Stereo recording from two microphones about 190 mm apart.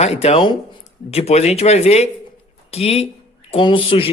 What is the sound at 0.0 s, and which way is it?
A man's voice, 35° left (ahead or behind).